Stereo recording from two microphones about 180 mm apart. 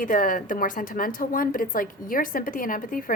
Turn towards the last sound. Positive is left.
turn(degrees=50)  # may be behind; listen again after turning